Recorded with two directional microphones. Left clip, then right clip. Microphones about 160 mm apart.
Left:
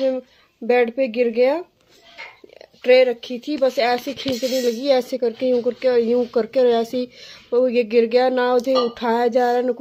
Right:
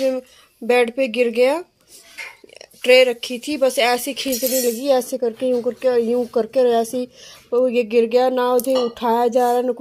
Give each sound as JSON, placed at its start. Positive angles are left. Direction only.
{"t": 0.7, "sound": "speech", "side_deg": -10}
{"t": 2.8, "sound": "speech", "side_deg": -5}